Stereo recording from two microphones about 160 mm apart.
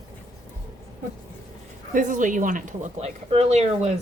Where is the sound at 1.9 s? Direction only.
50° right (ahead or behind).